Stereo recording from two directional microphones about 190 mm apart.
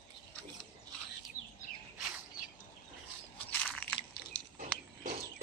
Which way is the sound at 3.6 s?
5° left (ahead or behind).